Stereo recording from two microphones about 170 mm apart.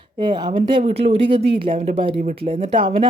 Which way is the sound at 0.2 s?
25° right (ahead or behind).